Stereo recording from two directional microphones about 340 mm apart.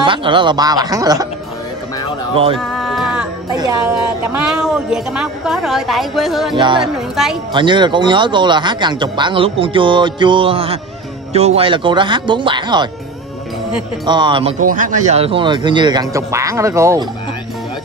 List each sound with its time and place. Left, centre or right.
0.0 s speech: centre
2.3 s speech: centre
2.6 s music: centre
4.4 s a woman's voice: centre
6.5 s speech: centre
6.8 s a woman's voice: centre
7.5 s speech: centre
14.0 s speech: centre